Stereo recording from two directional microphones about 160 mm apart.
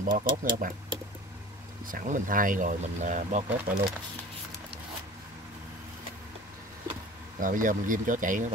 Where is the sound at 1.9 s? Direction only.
55° right (ahead or behind).